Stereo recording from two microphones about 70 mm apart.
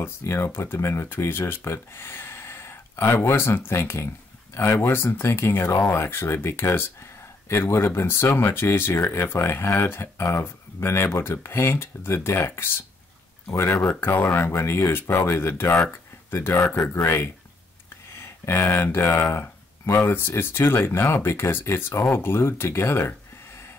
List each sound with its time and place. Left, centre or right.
0.0 s speech: left
14.4 s speech: left
18.4 s speech: left